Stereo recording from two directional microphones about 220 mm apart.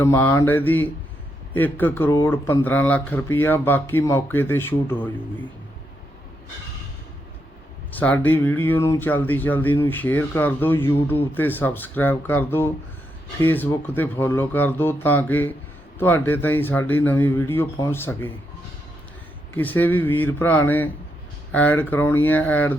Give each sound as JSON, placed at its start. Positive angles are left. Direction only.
{"t": 0.0, "sound": "speech", "side_deg": 10}
{"t": 7.9, "sound": "speech", "side_deg": 5}
{"t": 19.5, "sound": "speech", "side_deg": 10}